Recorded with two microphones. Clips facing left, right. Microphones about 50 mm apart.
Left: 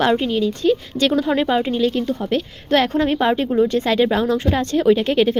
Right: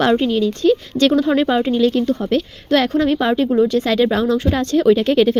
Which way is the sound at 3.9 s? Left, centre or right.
Centre.